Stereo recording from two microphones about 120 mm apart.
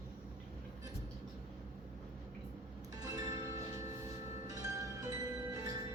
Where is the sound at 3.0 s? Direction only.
30° right (ahead or behind).